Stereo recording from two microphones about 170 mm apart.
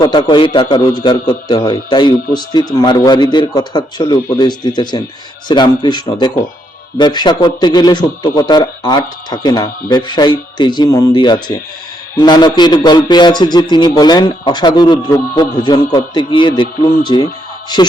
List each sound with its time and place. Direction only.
0.0 s a man's voice: 25° left (ahead or behind)